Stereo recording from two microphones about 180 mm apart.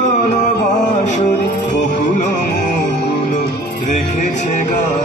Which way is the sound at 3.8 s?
40° left (ahead or behind).